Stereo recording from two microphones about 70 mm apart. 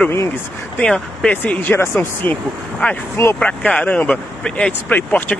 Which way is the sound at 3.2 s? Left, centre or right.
Left.